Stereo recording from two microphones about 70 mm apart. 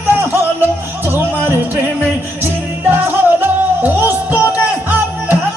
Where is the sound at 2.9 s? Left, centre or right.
Right.